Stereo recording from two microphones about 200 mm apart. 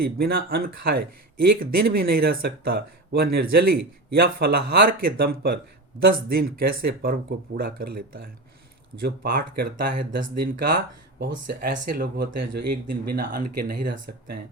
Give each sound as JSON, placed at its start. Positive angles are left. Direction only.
{"t": 0.0, "sound": "speech", "side_deg": -50}